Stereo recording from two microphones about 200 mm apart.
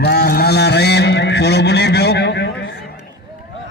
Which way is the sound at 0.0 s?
55° left (ahead or behind).